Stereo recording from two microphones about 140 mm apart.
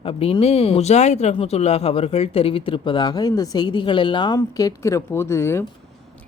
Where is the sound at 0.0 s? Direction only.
40° left (ahead or behind).